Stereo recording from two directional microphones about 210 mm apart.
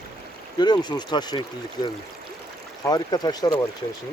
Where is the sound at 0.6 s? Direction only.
20° left (ahead or behind).